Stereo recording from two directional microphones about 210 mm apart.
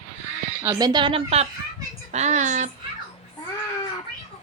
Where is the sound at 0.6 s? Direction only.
15° right (ahead or behind); by 2.6 s 35° right (ahead or behind).